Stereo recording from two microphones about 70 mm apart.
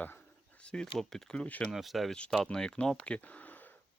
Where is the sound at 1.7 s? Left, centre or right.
Centre.